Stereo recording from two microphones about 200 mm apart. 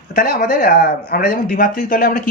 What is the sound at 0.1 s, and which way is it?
Speech, 45° left (ahead or behind).